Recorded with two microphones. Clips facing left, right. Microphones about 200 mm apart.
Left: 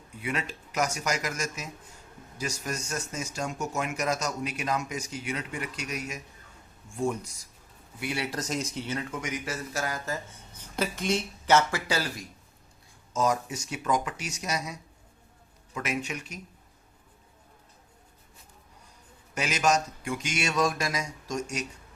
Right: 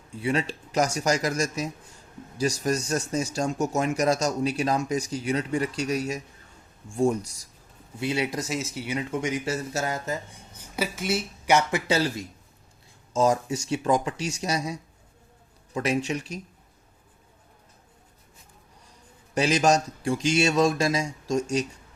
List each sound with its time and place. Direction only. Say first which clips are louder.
0.1 s speech: right 7 dB; 30° right (ahead or behind); by 9.0 s 10° right (ahead or behind)
9.0 s speech: right 6 dB; 25° right (ahead or behind)
10.6 s speech: right 1 dB; 5° right (ahead or behind); by 16.4 s 30° right (ahead or behind)
19.3 s speech: right 5 dB; 30° right (ahead or behind)